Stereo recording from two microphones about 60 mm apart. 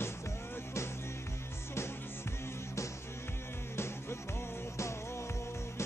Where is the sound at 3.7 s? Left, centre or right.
Left.